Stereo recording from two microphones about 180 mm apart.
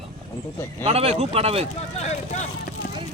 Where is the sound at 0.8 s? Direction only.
35° right (ahead or behind).